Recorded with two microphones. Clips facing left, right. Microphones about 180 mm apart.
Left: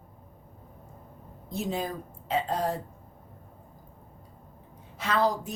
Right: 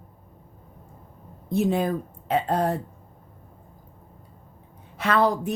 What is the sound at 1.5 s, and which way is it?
A woman's voice, 60° right (ahead or behind).